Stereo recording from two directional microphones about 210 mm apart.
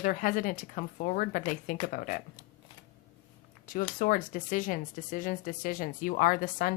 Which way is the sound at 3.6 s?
40° left (ahead or behind).